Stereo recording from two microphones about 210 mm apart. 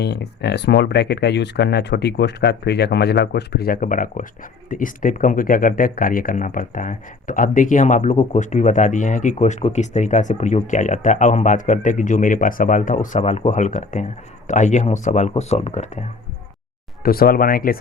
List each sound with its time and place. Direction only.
0.0 s speech: 50° left (ahead or behind); by 16.0 s 30° left (ahead or behind)
17.0 s speech: 45° left (ahead or behind)